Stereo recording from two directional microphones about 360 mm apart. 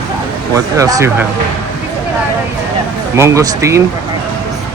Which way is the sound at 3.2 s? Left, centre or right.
Centre.